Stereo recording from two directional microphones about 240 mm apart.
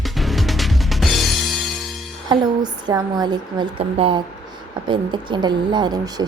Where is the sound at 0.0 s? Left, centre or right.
Centre.